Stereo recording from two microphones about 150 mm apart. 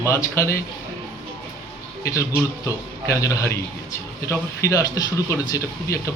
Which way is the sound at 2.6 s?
20° left (ahead or behind).